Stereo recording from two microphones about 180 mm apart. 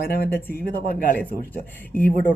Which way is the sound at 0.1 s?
55° left (ahead or behind).